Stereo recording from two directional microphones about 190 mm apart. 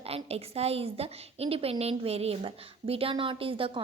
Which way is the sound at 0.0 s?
30° right (ahead or behind).